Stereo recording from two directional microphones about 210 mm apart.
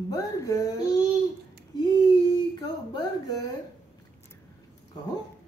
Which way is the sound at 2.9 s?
20° left (ahead or behind).